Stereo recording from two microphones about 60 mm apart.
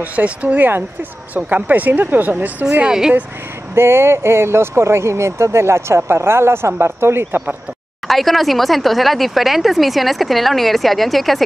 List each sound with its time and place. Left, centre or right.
0.0 s speech: right
2.9 s speech: centre
3.7 s speech: right
8.1 s speech: centre